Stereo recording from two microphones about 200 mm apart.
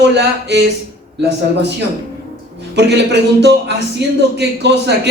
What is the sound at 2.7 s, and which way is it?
A man's voice, 60° right (ahead or behind).